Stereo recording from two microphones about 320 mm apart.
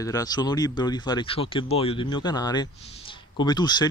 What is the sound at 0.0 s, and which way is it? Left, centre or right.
Speech, centre.